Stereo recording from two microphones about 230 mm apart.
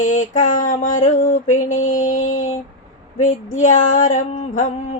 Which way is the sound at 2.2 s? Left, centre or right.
Left.